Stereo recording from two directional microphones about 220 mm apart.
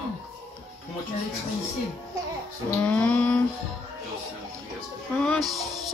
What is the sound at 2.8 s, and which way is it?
Speech, 5° left (ahead or behind).